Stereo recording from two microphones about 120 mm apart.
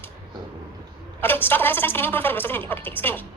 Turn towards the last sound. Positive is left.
turn(degrees=15)  # may be behind; listen again after turning